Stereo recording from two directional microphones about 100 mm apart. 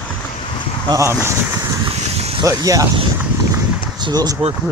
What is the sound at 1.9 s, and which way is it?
Vehicle, 90° right.